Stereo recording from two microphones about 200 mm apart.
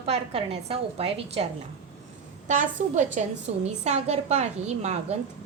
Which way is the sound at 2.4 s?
40° right (ahead or behind).